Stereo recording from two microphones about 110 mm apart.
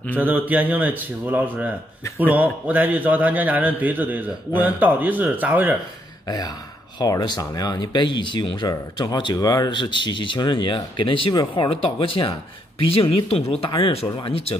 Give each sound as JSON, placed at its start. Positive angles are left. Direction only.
{"t": 0.2, "sound": "a man's voice", "side_deg": -15}
{"t": 6.2, "sound": "speech", "side_deg": 35}
{"t": 11.7, "sound": "speech", "side_deg": 55}
{"t": 13.7, "sound": "speech", "side_deg": 50}